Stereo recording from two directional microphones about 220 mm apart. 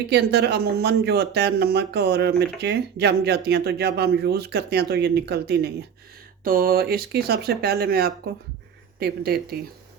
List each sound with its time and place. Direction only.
0.1 s speech: 50° right (ahead or behind)